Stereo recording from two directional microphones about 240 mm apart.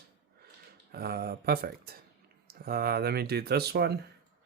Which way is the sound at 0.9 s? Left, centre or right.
Right.